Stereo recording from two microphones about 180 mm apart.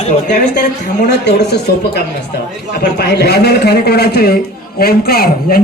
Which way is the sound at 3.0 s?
65° left (ahead or behind).